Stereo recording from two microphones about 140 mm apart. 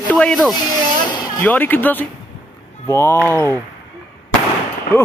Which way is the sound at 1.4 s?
10° left (ahead or behind).